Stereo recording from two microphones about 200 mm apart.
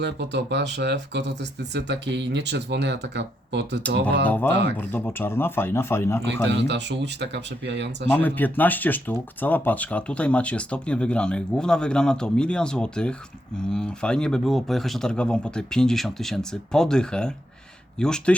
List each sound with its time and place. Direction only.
0.0 s speech: 60° right (ahead or behind)
4.8 s speech: 10° left (ahead or behind)
6.2 s speech: 60° right (ahead or behind)
8.1 s speech: 10° left (ahead or behind)